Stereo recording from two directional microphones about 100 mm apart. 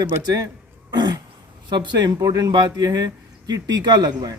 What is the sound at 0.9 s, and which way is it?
Throat clearing, 45° right (ahead or behind).